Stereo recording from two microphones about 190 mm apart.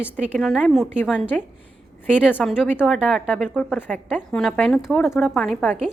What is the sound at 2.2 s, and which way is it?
A woman's voice, 5° right (ahead or behind).